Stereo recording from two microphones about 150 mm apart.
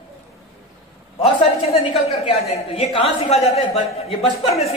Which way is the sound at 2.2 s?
35° left (ahead or behind).